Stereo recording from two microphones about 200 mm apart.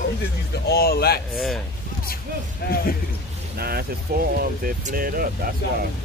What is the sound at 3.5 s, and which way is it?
Speech, 50° right (ahead or behind).